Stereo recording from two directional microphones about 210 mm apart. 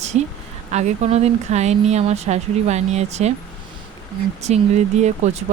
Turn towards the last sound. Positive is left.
turn(degrees=-35)  # may be behind; listen again after turning